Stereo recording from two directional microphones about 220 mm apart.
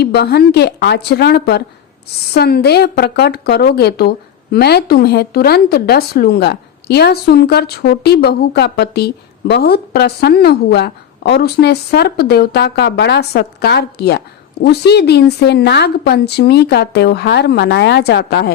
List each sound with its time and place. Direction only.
0.0 s a woman's voice: 45° left (ahead or behind)